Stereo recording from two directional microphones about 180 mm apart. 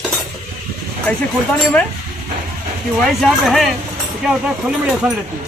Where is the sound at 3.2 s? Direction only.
Centre (ahead or behind).